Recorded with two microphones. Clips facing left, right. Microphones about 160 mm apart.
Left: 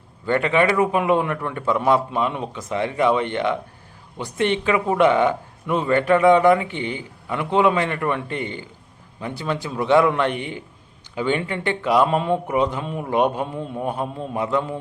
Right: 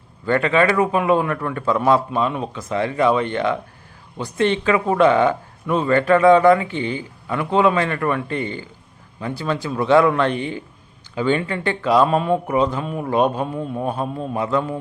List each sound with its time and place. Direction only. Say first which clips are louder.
0.3 s speech: right 1 dB; 20° left (ahead or behind)